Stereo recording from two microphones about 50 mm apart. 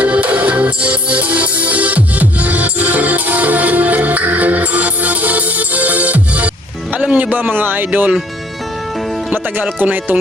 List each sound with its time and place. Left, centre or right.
0.0 s music: right
6.9 s a man's voice: right
9.3 s speech: right